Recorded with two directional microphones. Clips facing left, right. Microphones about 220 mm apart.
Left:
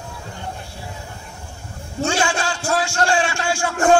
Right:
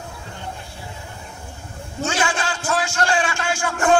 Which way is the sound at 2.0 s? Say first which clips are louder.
Left 2 dB; 25° left (ahead or behind).